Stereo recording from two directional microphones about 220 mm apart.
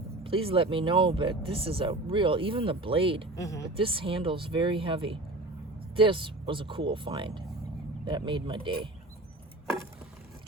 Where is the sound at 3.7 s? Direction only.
25° right (ahead or behind).